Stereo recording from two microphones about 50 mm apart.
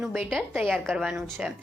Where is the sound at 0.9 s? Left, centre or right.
Centre.